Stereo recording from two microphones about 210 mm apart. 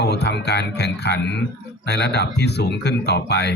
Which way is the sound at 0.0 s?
50° left (ahead or behind).